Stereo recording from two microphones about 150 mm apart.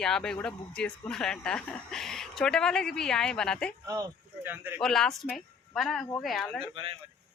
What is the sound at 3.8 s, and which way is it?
Speech, 20° right (ahead or behind).